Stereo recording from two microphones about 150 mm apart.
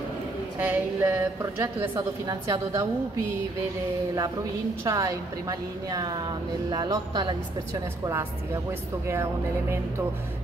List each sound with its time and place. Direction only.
0.6 s a woman's voice: 10° right (ahead or behind)
4.8 s a woman's voice: 20° right (ahead or behind)
8.0 s speech: 15° right (ahead or behind)